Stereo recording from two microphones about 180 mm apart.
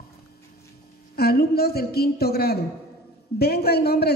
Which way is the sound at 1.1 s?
60° left (ahead or behind).